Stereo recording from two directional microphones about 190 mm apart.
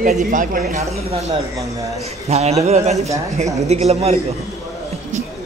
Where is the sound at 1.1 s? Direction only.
30° right (ahead or behind).